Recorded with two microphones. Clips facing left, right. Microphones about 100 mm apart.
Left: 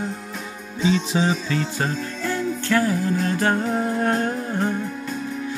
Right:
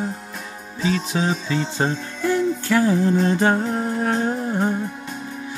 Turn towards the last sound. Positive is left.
turn(degrees=-10)  # may be behind; listen again after turning